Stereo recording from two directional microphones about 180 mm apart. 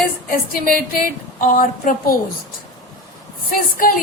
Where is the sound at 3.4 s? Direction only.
50° left (ahead or behind).